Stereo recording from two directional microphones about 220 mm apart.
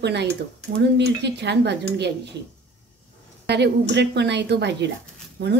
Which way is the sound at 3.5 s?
50° right (ahead or behind).